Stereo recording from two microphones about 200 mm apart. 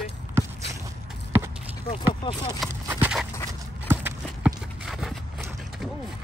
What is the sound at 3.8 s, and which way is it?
Clip-clop, 10° right (ahead or behind).